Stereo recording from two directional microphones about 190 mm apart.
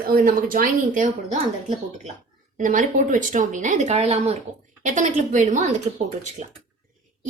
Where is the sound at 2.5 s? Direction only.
45° right (ahead or behind).